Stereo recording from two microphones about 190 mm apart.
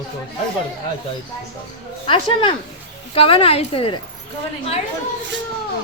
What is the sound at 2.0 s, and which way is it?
A child's voice, 25° left (ahead or behind).